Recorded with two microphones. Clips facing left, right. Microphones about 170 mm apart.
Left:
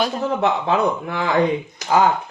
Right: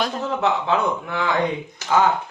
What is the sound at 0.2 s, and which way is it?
A man's voice, 35° left (ahead or behind).